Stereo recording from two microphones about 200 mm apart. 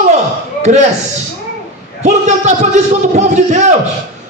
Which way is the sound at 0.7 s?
40° right (ahead or behind).